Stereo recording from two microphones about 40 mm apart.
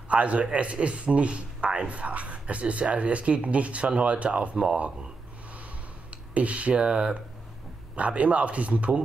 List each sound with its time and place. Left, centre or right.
0.1 s a man's voice: right
6.0 s a man's voice: right